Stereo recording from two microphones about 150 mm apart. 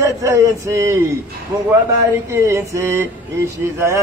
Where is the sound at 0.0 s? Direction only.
20° right (ahead or behind).